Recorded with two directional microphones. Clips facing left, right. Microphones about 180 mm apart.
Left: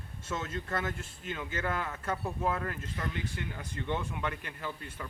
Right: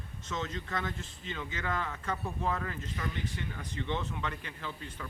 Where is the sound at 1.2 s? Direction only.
10° left (ahead or behind).